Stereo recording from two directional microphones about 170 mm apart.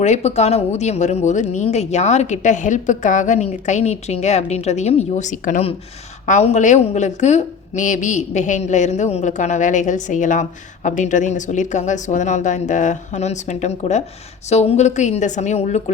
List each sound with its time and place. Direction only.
0.0 s a woman's voice: 40° left (ahead or behind)